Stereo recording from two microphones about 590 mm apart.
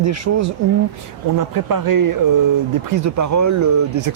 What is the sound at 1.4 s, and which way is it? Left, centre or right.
Speech, right.